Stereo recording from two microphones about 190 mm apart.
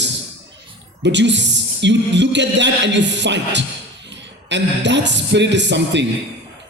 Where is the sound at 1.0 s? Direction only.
65° right (ahead or behind).